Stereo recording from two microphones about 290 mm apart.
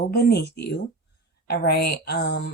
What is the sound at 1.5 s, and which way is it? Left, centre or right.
Speech, left.